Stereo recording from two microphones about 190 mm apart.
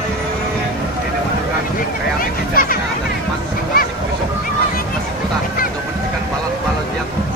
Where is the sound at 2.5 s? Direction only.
50° left (ahead or behind).